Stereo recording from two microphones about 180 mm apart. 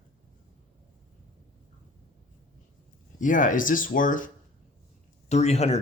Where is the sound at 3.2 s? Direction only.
45° left (ahead or behind).